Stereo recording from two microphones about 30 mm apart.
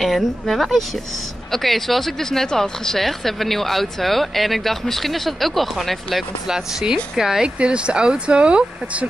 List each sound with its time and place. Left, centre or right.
0.0 s speech: centre
2.2 s speech: centre
3.0 s speech: centre
7.2 s speech: centre
7.4 s speech: right